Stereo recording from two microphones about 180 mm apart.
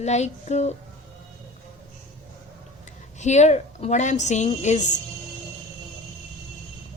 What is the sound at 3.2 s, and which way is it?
A woman's voice, 40° left (ahead or behind).